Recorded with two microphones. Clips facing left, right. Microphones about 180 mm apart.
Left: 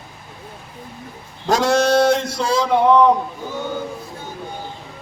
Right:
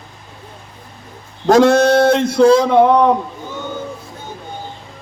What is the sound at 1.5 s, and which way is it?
A man's voice, 55° right (ahead or behind).